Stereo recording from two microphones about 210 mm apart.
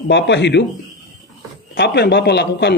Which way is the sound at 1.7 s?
55° left (ahead or behind).